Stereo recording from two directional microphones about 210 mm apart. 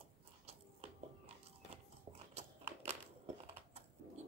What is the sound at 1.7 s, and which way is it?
Biting, 30° right (ahead or behind).